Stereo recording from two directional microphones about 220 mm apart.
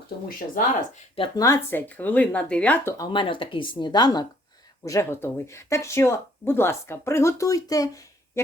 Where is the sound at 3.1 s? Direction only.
20° left (ahead or behind).